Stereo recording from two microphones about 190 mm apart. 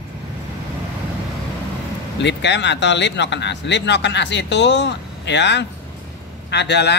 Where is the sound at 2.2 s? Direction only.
65° left (ahead or behind).